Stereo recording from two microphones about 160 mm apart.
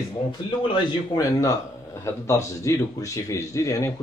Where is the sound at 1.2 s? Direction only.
20° left (ahead or behind).